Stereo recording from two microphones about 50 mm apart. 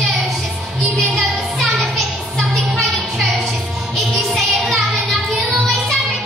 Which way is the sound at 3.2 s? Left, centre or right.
Centre.